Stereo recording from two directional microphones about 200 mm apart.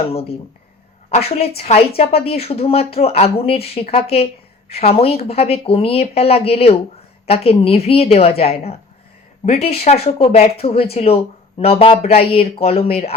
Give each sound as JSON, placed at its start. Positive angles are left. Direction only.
{"t": 0.1, "sound": "speech", "side_deg": 30}